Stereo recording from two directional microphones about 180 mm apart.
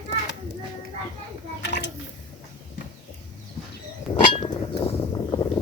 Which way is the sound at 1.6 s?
75° left (ahead or behind).